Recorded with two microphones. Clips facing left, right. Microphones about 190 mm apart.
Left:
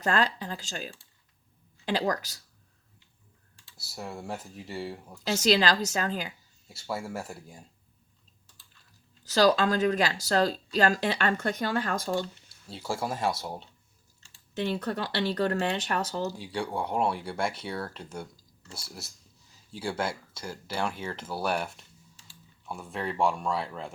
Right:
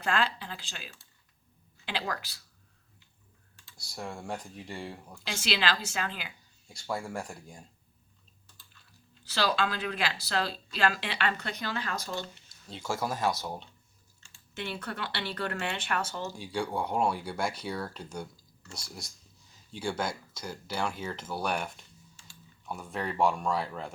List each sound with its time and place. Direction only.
0.0 s speech: 40° left (ahead or behind)
3.8 s speech: 5° left (ahead or behind)
5.2 s speech: 40° left (ahead or behind)
6.7 s speech: 5° left (ahead or behind)
9.2 s speech: 40° left (ahead or behind)
12.8 s speech: 30° left (ahead or behind)
16.4 s speech: centre (ahead or behind)
17.4 s speech: 25° left (ahead or behind)
17.7 s speech: centre (ahead or behind)
20.0 s speech: 30° left (ahead or behind)
20.4 s speech: centre (ahead or behind)